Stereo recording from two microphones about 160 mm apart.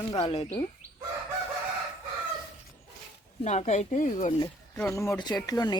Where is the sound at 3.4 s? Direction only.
45° left (ahead or behind).